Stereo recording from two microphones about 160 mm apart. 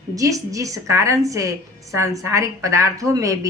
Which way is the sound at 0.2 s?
20° right (ahead or behind).